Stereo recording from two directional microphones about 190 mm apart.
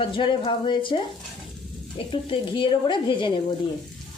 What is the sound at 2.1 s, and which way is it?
A woman's voice, 25° left (ahead or behind).